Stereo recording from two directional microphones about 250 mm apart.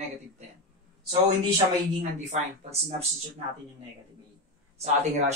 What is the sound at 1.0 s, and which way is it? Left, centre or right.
Speech, right.